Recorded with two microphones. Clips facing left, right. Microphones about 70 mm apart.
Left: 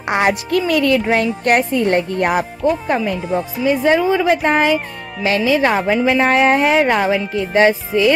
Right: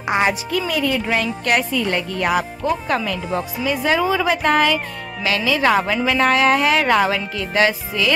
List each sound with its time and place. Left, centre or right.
0.1 s speech: left
1.0 s speech: left
3.6 s a woman's voice: centre